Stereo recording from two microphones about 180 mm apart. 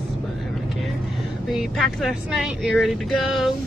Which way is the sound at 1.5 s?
Centre (ahead or behind).